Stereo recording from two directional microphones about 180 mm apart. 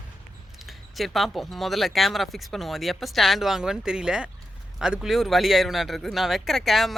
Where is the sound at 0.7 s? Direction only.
Centre (ahead or behind).